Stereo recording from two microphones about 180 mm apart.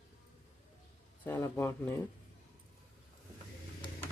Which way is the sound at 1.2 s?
15° left (ahead or behind).